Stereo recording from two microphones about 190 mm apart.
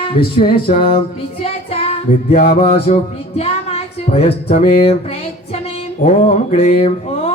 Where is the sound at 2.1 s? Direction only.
50° left (ahead or behind).